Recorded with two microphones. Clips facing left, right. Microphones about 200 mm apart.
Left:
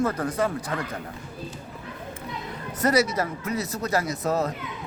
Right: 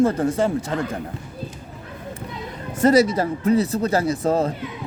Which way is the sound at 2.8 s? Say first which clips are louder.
Right 6 dB; 30° right (ahead or behind).